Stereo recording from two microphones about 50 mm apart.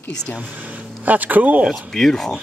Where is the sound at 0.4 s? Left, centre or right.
Right.